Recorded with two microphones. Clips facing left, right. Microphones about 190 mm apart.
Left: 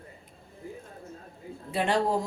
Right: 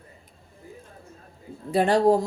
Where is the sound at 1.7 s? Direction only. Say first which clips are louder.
Right 6 dB; 40° right (ahead or behind).